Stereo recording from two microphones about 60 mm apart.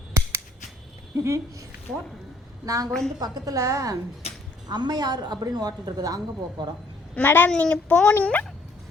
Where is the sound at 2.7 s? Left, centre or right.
Right.